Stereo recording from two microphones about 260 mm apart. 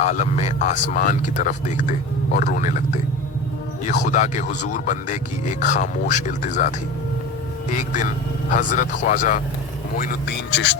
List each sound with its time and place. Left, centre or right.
0.0 s speech: left